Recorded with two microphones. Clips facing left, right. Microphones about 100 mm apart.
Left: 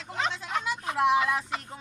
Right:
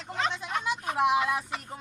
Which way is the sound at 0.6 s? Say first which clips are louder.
Even; 20° right (ahead or behind).